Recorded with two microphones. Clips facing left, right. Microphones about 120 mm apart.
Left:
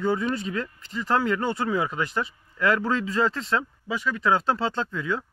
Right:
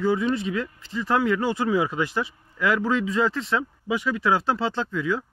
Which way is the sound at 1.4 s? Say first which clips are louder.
Right 3 dB; 5° right (ahead or behind).